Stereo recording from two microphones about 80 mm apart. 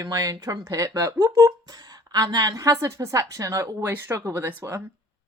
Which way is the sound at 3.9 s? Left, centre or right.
Right.